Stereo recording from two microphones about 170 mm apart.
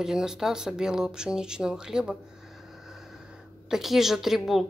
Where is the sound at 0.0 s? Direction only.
5° right (ahead or behind).